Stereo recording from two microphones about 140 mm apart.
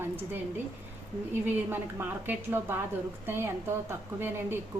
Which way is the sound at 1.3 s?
15° right (ahead or behind).